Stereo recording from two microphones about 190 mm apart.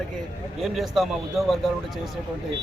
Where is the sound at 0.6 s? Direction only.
Centre (ahead or behind).